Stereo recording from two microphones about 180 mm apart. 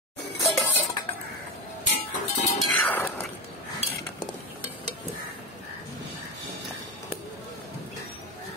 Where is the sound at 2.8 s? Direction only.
10° left (ahead or behind).